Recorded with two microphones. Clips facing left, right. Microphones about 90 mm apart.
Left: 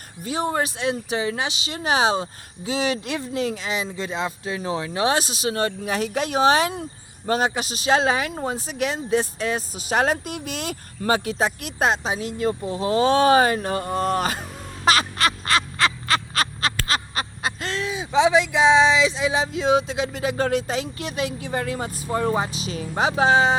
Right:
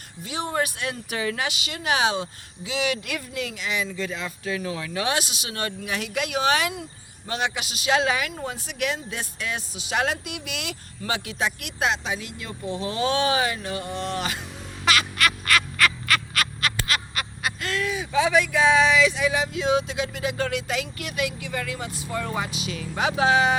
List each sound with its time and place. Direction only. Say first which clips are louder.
0.3 s speech: left 3 dB; 35° left (ahead or behind)
14.8 s quack: left 3 dB; 30° left (ahead or behind)
16.8 s speech: left 3 dB; 30° left (ahead or behind)